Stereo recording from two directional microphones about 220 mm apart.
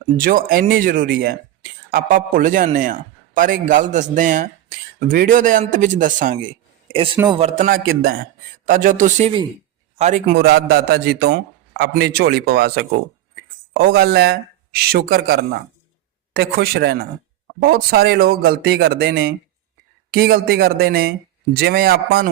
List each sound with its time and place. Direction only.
0.2 s a man's voice: 40° right (ahead or behind)
6.9 s a man's voice: 25° right (ahead or behind); by 22.3 s 45° right (ahead or behind)